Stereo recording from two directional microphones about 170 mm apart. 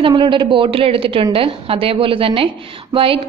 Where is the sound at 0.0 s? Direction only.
30° right (ahead or behind).